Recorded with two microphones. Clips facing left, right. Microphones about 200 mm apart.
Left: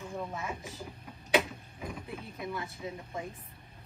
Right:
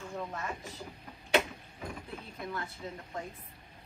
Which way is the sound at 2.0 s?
10° left (ahead or behind).